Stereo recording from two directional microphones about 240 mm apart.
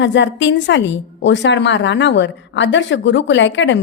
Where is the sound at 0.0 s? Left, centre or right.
Left.